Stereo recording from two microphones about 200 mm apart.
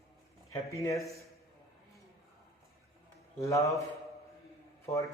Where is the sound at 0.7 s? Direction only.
15° left (ahead or behind).